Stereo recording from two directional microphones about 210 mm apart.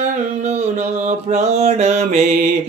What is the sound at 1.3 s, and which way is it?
Music, 30° right (ahead or behind).